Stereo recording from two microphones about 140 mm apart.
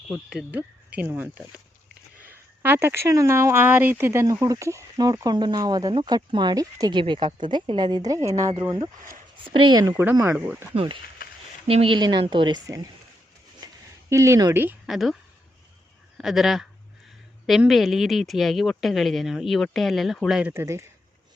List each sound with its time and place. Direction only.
0.1 s speech: 5° right (ahead or behind); by 9.9 s 30° right (ahead or behind)
10.0 s speech: 15° right (ahead or behind)
10.8 s speech: 35° right (ahead or behind)
13.6 s a sound: 25° right (ahead or behind)
14.1 s speech: 20° right (ahead or behind)
14.8 s speech: centre (ahead or behind)
16.1 s speech: centre (ahead or behind)
20.5 s speech: 20° right (ahead or behind)